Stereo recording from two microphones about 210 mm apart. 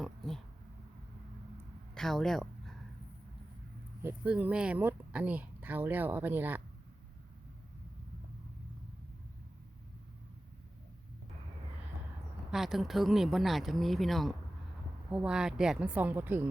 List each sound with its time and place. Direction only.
2.0 s a sound: centre (ahead or behind)
4.0 s speech: 10° right (ahead or behind)
12.5 s speech: centre (ahead or behind)